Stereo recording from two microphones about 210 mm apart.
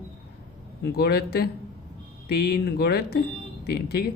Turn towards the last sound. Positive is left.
turn(degrees=50)  # may be behind; listen again after turning